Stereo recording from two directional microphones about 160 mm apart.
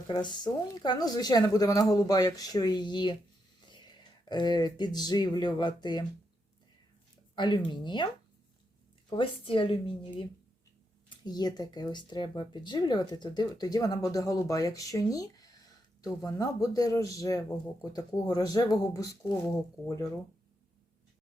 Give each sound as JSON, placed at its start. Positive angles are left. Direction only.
{"t": 0.1, "sound": "speech", "side_deg": 30}
{"t": 7.3, "sound": "speech", "side_deg": 30}
{"t": 9.0, "sound": "speech", "side_deg": 35}